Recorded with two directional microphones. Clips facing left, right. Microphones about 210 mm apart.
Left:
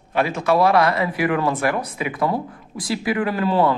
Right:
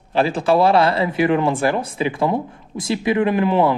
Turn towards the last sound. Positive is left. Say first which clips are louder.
# right 2 dB
turn(degrees=-20)  # may be behind; listen again after turning